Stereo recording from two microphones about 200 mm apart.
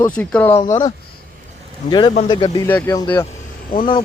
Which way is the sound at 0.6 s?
25° left (ahead or behind).